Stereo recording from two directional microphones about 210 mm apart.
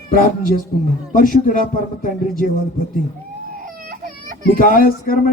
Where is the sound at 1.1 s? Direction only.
40° left (ahead or behind).